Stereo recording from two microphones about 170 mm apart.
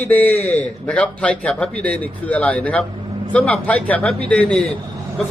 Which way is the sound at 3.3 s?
5° left (ahead or behind).